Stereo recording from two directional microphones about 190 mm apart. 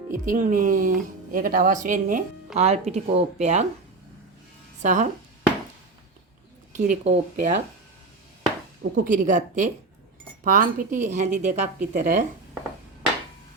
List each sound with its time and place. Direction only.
0.1 s a woman's voice: 45° right (ahead or behind)
4.8 s a woman's voice: 40° right (ahead or behind)
6.7 s a woman's voice: 40° right (ahead or behind)
8.8 s a woman's voice: 45° right (ahead or behind)